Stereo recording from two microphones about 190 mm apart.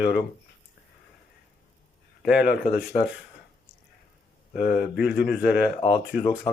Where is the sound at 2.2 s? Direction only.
5° right (ahead or behind).